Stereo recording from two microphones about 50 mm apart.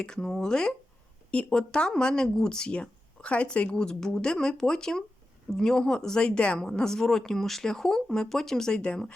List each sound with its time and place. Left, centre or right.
0.0 s speech: centre
8.7 s speech: left